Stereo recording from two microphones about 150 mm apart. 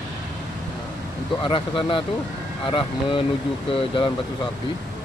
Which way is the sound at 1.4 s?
35° left (ahead or behind).